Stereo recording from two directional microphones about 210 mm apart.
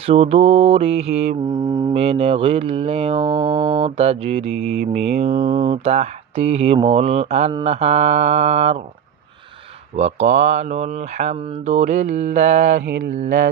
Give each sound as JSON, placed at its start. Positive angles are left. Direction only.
{"t": 0.0, "sound": "mantra", "side_deg": -30}
{"t": 1.6, "sound": "mantra", "side_deg": -15}
{"t": 1.9, "sound": "mantra", "side_deg": -30}
{"t": 5.1, "sound": "speech", "side_deg": -30}
{"t": 5.5, "sound": "mantra", "side_deg": -25}
{"t": 9.9, "sound": "speech", "side_deg": -30}